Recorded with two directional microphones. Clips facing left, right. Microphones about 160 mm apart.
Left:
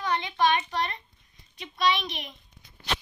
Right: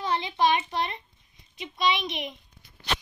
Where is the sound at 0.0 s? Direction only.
25° right (ahead or behind).